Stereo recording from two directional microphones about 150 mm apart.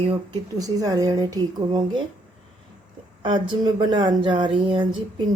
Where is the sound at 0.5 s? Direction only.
25° right (ahead or behind).